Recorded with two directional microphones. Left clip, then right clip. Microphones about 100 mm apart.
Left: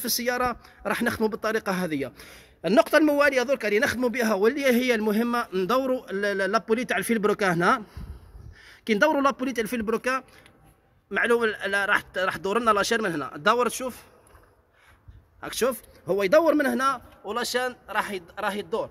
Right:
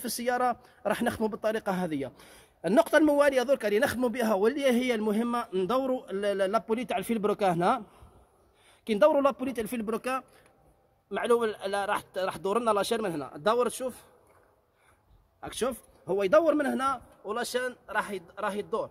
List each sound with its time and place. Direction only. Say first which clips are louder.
0.0 s speech: left 2 dB; 30° right (ahead or behind)
11.1 s a man's voice: left 4 dB; 15° right (ahead or behind)
15.4 s a man's voice: left 6 dB; 15° right (ahead or behind)